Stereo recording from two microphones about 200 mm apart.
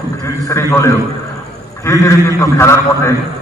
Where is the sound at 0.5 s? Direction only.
15° left (ahead or behind).